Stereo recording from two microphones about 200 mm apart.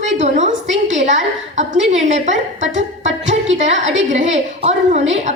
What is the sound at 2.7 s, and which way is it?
Music, 65° right (ahead or behind).